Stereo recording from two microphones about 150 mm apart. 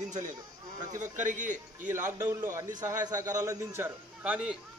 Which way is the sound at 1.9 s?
15° right (ahead or behind).